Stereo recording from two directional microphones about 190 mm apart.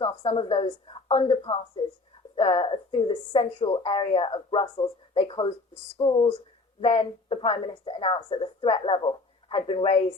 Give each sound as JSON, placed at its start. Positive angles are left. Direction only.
{"t": 0.0, "sound": "speech", "side_deg": 25}